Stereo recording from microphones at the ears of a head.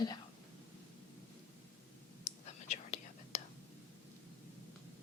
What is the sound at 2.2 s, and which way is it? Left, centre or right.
Whispering, left.